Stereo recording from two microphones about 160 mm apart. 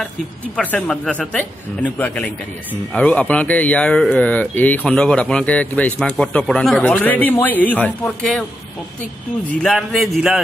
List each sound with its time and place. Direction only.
0.6 s speech: 10° left (ahead or behind)
9.6 s a man's voice: centre (ahead or behind)